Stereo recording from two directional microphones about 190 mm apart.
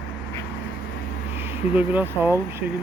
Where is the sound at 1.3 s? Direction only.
10° right (ahead or behind).